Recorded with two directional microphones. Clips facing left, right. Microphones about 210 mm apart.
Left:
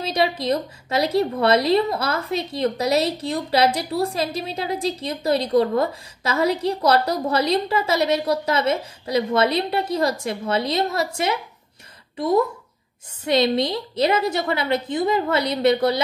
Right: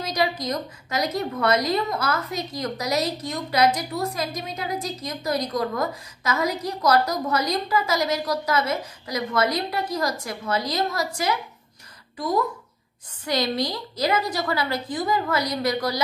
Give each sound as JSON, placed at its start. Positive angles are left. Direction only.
{"t": 0.0, "sound": "a woman's voice", "side_deg": 25}
{"t": 12.2, "sound": "a woman's voice", "side_deg": 25}